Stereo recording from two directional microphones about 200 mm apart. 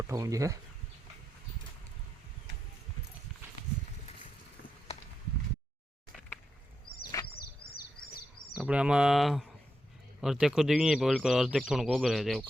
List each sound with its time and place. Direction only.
0.1 s speech: 15° right (ahead or behind)
7.1 s a sound: 15° left (ahead or behind)
8.5 s speech: 5° right (ahead or behind)